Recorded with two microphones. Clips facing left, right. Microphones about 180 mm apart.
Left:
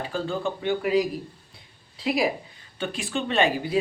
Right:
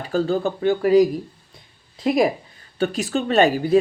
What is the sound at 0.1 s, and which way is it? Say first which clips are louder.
Speech: right 10 dB; 40° right (ahead or behind).